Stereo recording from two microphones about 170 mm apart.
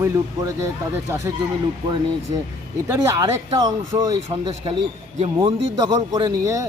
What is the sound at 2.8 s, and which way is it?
Speech, 15° right (ahead or behind).